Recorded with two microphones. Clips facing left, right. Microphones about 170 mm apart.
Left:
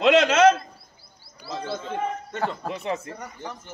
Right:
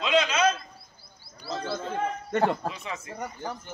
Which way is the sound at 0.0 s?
75° left (ahead or behind).